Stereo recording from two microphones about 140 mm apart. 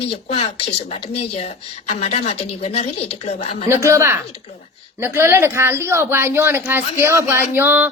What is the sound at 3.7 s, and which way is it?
Speech, 20° right (ahead or behind).